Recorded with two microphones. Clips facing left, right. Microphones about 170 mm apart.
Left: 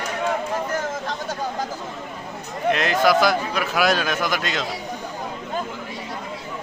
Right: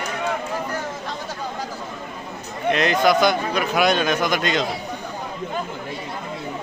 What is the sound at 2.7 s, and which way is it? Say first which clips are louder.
A man's voice: right 1 dB; centre (ahead or behind).